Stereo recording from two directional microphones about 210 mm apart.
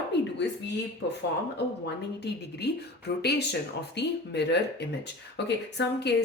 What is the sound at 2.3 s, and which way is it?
A woman's voice, 55° left (ahead or behind).